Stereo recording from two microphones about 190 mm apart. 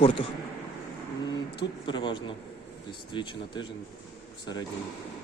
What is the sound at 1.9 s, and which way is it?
Speech, 25° left (ahead or behind).